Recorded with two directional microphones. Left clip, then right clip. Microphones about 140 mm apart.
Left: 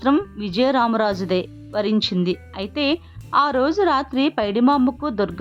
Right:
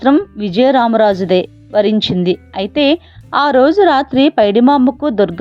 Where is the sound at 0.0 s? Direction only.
25° right (ahead or behind).